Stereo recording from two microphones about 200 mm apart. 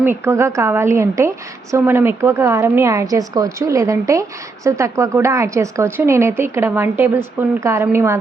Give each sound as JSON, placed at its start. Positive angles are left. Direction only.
{"t": 0.0, "sound": "a woman's voice", "side_deg": -10}